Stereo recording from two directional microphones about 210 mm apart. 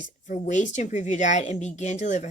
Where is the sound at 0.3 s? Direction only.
35° left (ahead or behind).